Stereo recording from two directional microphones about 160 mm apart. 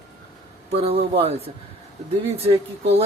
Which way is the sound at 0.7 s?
40° right (ahead or behind).